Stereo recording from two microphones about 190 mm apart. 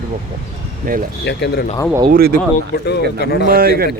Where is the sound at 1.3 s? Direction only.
60° left (ahead or behind).